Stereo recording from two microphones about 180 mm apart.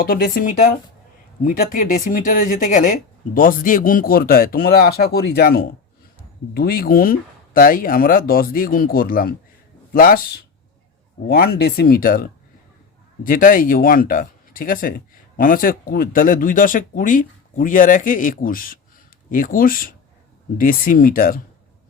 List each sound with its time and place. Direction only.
0.0 s speech: 55° left (ahead or behind)
11.3 s speech: 55° left (ahead or behind)
13.2 s speech: 50° left (ahead or behind)